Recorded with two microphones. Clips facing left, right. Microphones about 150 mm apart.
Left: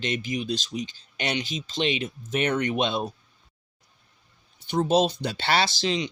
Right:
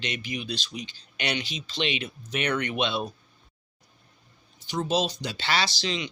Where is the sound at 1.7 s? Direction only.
45° left (ahead or behind).